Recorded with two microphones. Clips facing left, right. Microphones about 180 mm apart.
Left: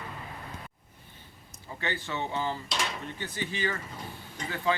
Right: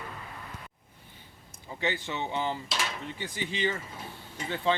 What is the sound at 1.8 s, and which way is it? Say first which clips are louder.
Speech: right 1 dB; 20° right (ahead or behind).